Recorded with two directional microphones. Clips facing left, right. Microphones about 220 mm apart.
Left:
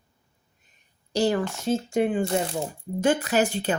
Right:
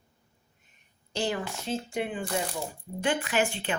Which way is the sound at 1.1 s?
40° left (ahead or behind).